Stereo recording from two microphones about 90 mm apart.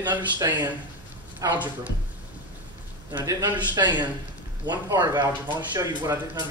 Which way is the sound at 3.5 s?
55° right (ahead or behind).